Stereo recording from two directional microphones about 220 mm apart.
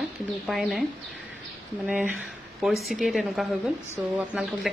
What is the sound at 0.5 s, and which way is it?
Speech, centre (ahead or behind).